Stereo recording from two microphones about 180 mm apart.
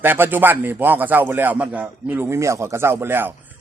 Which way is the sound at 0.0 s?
10° right (ahead or behind).